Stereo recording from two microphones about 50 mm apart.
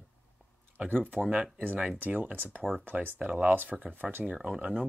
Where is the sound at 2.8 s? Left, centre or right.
Right.